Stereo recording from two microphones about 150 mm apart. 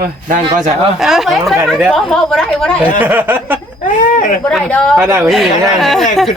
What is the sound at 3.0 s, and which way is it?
Speech, 15° right (ahead or behind).